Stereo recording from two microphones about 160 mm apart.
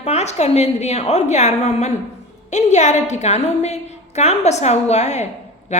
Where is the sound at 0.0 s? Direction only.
45° left (ahead or behind).